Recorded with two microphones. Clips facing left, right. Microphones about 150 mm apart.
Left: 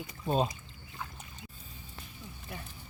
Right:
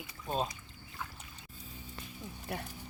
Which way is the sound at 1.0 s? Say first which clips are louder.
Left 1 dB; centre (ahead or behind).